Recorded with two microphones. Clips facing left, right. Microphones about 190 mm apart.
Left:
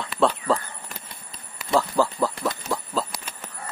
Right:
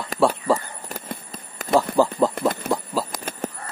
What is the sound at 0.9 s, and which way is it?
Insect, 45° right (ahead or behind).